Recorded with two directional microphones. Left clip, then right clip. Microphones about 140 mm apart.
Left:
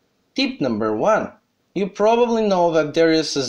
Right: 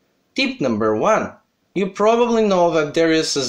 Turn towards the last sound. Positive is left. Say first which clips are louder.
# even
turn(degrees=30)  # may be behind; listen again after turning